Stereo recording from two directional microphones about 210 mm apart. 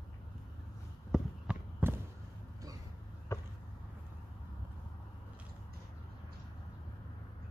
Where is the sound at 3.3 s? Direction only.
15° left (ahead or behind).